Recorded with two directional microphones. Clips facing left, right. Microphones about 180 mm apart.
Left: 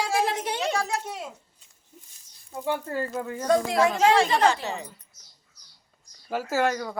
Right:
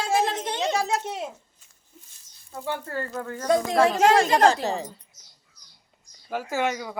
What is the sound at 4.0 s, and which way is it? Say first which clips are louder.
Speech: right 2 dB; 45° right (ahead or behind).